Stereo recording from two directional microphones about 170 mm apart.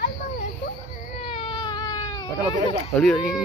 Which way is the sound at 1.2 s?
35° left (ahead or behind).